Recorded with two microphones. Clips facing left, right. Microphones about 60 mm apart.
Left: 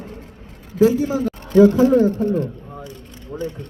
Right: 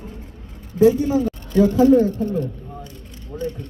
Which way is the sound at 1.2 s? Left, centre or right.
Left.